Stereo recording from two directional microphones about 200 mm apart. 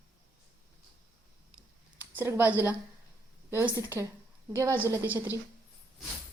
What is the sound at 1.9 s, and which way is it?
A woman's voice, 10° right (ahead or behind).